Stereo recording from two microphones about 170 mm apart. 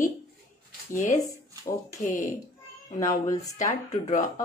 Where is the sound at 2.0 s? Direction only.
50° left (ahead or behind).